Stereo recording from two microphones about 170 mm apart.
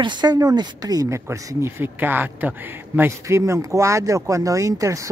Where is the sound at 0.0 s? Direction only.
25° right (ahead or behind).